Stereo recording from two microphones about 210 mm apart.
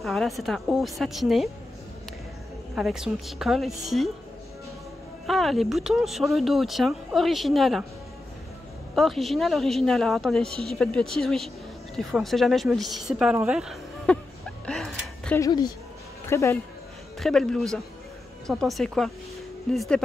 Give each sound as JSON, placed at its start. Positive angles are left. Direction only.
{"t": 0.0, "sound": "speech", "side_deg": 0}
{"t": 2.7, "sound": "speech", "side_deg": 0}
{"t": 5.2, "sound": "speech", "side_deg": 0}
{"t": 8.9, "sound": "speech", "side_deg": 0}
{"t": 14.7, "sound": "a sound", "side_deg": 5}
{"t": 15.4, "sound": "speech", "side_deg": 20}
{"t": 17.2, "sound": "speech", "side_deg": 5}